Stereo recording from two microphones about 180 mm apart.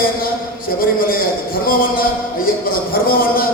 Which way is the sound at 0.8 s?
55° left (ahead or behind).